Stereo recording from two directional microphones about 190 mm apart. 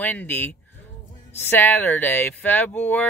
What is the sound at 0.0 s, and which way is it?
Speech, 10° left (ahead or behind).